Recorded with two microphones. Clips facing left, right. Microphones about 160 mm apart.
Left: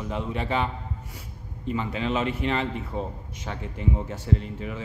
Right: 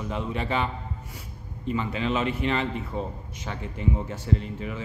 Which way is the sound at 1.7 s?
40° left (ahead or behind).